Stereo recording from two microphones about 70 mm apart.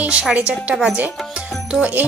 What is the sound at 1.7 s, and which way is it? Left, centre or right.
Music, centre.